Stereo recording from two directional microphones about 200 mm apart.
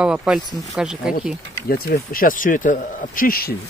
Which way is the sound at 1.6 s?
50° left (ahead or behind).